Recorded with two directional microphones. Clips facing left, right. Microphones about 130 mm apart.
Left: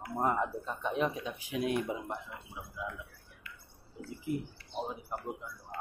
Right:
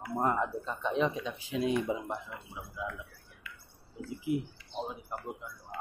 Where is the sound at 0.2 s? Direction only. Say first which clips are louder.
Right 1 dB; 10° left (ahead or behind).